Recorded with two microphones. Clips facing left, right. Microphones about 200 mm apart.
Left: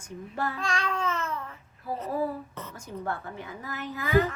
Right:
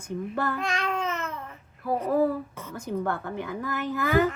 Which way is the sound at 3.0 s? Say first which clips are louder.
Right 5 dB; 65° right (ahead or behind).